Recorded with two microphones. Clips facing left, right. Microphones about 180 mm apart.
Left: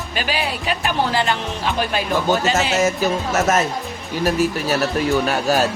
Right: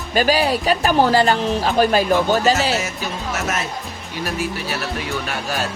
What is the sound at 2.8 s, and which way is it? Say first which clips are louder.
Speech: left 8 dB; 40° left (ahead or behind).